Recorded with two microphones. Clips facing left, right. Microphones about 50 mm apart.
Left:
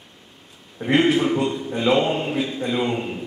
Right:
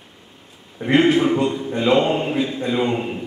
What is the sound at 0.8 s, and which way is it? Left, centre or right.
Speech, centre.